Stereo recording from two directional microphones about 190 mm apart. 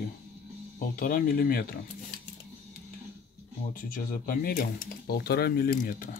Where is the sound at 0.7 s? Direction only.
50° left (ahead or behind).